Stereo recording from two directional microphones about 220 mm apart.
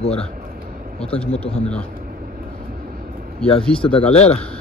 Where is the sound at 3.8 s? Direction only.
25° left (ahead or behind).